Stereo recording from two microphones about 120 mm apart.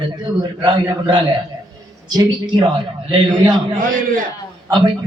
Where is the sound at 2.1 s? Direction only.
35° right (ahead or behind).